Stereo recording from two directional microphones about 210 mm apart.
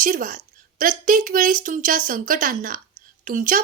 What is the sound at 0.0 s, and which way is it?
A woman's voice, 40° right (ahead or behind).